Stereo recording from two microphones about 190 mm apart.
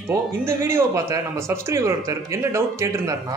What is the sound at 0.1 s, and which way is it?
Speech, 15° right (ahead or behind).